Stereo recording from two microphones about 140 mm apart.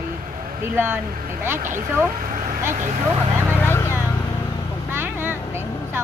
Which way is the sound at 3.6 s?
20° left (ahead or behind).